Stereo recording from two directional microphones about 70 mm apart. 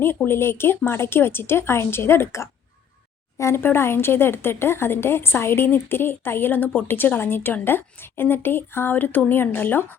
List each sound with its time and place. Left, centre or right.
0.3 s speech: left